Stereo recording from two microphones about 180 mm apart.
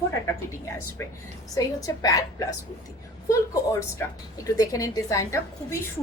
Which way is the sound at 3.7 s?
20° left (ahead or behind).